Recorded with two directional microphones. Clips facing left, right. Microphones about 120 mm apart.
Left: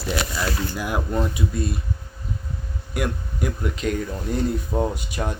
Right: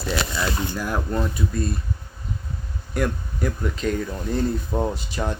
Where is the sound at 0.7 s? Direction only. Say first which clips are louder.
Even; 10° left (ahead or behind).